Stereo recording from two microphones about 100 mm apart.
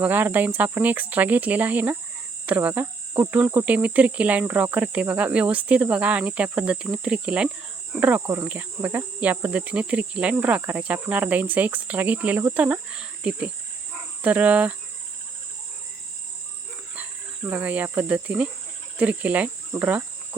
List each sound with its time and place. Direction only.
0.0 s cricket: 20° right (ahead or behind)
17.4 s cricket: 15° right (ahead or behind)
19.7 s insect: 20° right (ahead or behind)